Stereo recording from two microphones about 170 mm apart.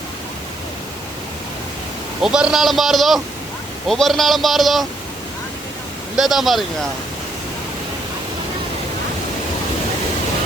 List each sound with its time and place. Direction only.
2.2 s a man's voice: 5° right (ahead or behind)
6.1 s a man's voice: centre (ahead or behind)